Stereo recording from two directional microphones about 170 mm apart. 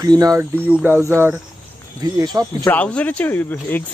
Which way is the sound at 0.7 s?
10° right (ahead or behind).